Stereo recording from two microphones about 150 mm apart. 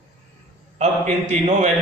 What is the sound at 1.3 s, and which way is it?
Speech, 50° right (ahead or behind).